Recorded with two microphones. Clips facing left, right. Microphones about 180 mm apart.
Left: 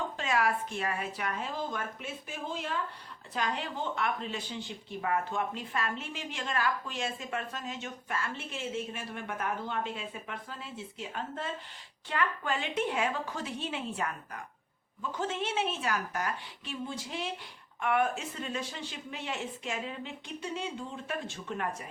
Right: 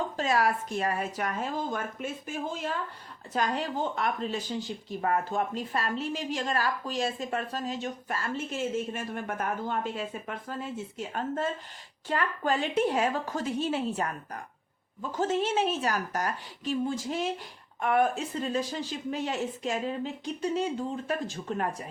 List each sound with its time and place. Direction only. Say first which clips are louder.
0.2 s speech: right 3 dB; 35° right (ahead or behind)